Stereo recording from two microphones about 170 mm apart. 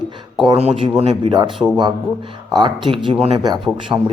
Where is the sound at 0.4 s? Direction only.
35° right (ahead or behind).